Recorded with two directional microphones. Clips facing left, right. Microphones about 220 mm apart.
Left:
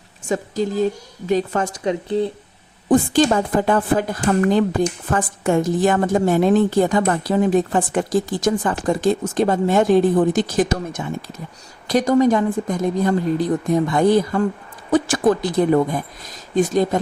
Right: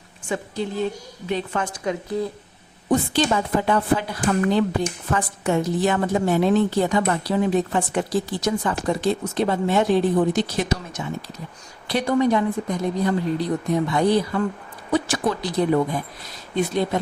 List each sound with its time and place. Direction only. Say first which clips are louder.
0.3 s a woman's voice: left 5 dB; 40° left (ahead or behind)
2.9 s speech: left 5 dB; 45° left (ahead or behind)